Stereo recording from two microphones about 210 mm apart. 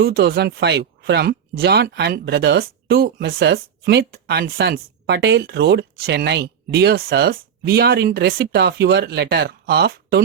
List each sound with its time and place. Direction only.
0.0 s speech: 50° right (ahead or behind)